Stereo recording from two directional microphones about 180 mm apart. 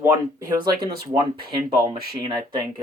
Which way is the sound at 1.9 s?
60° right (ahead or behind).